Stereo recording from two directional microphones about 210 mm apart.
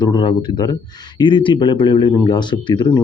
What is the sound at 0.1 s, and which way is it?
Speech, 25° left (ahead or behind).